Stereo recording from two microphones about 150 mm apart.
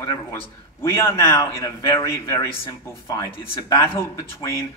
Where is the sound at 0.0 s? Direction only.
20° left (ahead or behind).